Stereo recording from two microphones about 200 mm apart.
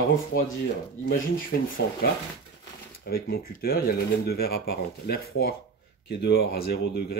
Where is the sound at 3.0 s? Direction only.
50° left (ahead or behind).